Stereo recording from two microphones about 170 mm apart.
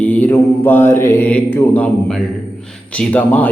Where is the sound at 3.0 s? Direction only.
10° left (ahead or behind).